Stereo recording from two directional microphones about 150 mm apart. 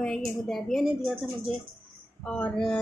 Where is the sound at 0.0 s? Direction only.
5° left (ahead or behind).